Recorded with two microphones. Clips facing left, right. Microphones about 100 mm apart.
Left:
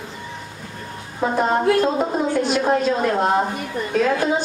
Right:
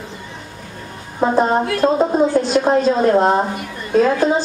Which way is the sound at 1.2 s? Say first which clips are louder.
Right 3 dB; 30° right (ahead or behind).